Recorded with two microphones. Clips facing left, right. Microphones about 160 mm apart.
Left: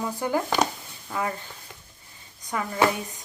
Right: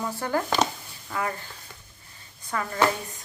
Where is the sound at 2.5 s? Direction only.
15° left (ahead or behind).